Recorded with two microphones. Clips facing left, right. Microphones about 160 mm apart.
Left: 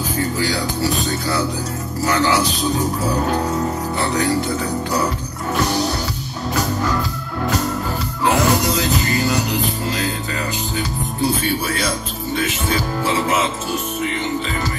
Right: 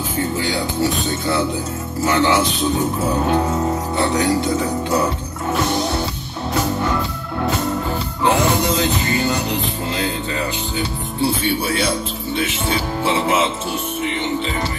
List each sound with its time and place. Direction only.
2.0 s music: 25° right (ahead or behind)
4.0 s speech: 30° right (ahead or behind)
8.7 s music: 35° left (ahead or behind)